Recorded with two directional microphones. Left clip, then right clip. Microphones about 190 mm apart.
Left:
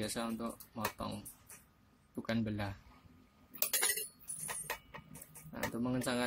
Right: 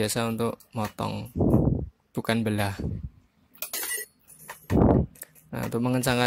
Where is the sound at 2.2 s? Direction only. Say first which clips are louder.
Right 12 dB; 45° right (ahead or behind).